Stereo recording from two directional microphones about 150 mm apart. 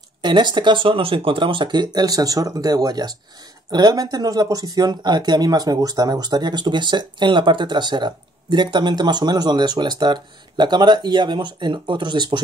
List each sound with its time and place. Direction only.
0.2 s speech: 30° right (ahead or behind)